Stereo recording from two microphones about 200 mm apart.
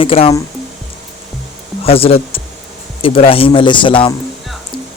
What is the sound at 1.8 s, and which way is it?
Speech, 30° left (ahead or behind).